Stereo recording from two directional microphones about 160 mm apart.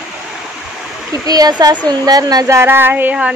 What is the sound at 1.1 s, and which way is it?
Speech, 20° right (ahead or behind).